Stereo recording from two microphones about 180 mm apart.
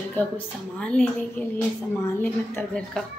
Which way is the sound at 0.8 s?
5° left (ahead or behind).